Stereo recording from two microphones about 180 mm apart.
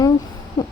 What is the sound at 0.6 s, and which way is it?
Owl, 20° left (ahead or behind).